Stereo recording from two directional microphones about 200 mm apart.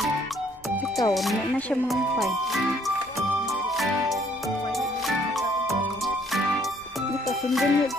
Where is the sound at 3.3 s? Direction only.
5° right (ahead or behind).